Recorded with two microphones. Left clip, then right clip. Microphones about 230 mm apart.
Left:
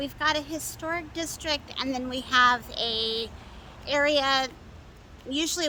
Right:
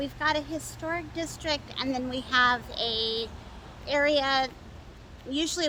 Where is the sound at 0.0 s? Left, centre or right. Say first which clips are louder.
Left 1 dB; centre.